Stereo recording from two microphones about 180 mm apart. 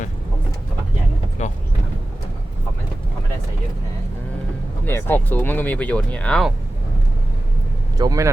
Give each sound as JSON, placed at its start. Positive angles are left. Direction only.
{"t": 1.4, "sound": "vehicle", "side_deg": 40}
{"t": 4.9, "sound": "speech", "side_deg": 10}
{"t": 7.9, "sound": "speech", "side_deg": -20}